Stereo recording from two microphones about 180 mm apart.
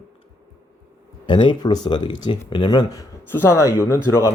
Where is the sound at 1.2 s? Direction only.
25° left (ahead or behind).